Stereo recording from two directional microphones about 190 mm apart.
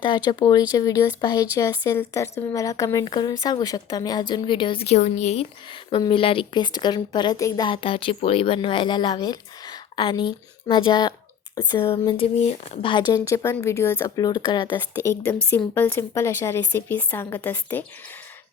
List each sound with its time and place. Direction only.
0.0 s speech: 20° left (ahead or behind)
15.1 s a woman's voice: 10° left (ahead or behind)